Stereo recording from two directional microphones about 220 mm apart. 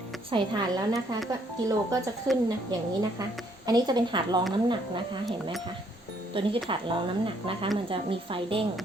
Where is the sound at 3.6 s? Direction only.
20° right (ahead or behind).